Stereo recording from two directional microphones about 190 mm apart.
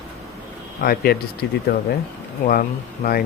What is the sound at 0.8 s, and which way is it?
Speech, 55° left (ahead or behind).